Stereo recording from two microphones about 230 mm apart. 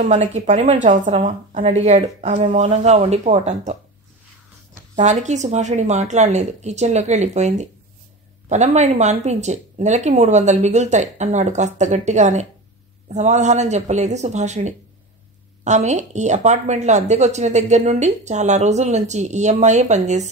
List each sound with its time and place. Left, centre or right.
0.0 s a woman's voice: right
4.9 s a woman's voice: right